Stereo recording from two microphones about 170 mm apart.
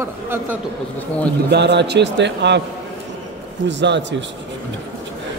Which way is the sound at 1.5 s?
85° right.